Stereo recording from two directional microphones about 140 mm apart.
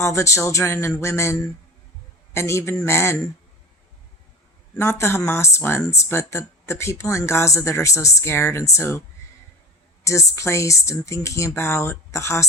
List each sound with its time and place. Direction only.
0.0 s speech: 20° left (ahead or behind)
4.7 s speech: 15° left (ahead or behind)
10.0 s speech: 20° left (ahead or behind)